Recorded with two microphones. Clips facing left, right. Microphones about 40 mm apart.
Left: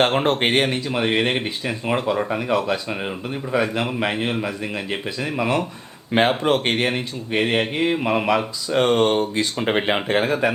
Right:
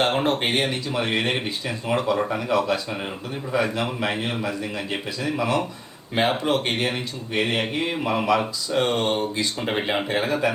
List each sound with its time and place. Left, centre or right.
0.3 s speech: left
9.6 s speech: left
10.1 s speech: left